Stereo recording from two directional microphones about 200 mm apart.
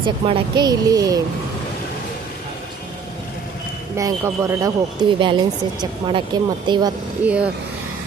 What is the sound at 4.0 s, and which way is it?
Speech, 15° right (ahead or behind).